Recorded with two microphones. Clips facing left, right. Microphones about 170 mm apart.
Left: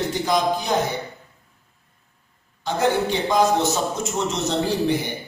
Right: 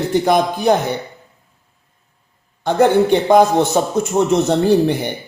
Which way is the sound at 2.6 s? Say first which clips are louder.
Right 8 dB; 55° right (ahead or behind).